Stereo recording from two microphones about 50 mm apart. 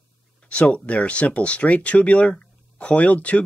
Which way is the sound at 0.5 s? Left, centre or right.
Left.